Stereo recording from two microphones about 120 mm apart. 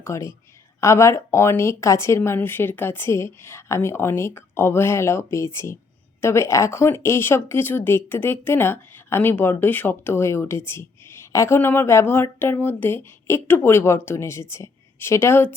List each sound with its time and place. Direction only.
0.0 s a woman's voice: 25° left (ahead or behind)